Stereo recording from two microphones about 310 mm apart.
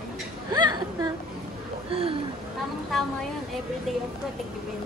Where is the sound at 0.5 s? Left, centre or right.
Centre.